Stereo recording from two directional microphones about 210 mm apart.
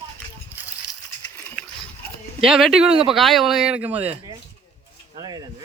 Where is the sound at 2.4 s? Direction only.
Centre (ahead or behind).